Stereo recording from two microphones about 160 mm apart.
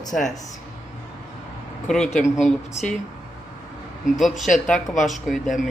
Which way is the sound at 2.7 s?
45° left (ahead or behind).